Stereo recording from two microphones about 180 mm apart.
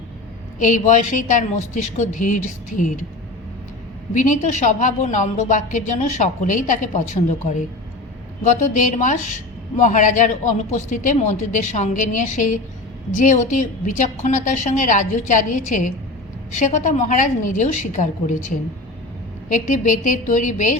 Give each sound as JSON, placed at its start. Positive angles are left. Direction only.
{"t": 0.6, "sound": "a woman's voice", "side_deg": 45}
{"t": 4.1, "sound": "a woman's voice", "side_deg": 45}
{"t": 8.4, "sound": "a woman's voice", "side_deg": 40}
{"t": 19.5, "sound": "a woman's voice", "side_deg": 45}